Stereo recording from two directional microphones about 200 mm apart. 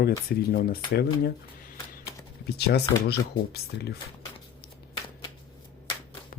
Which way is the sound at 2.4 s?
55° left (ahead or behind).